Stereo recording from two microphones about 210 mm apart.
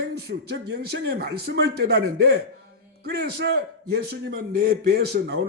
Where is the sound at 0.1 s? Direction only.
50° right (ahead or behind).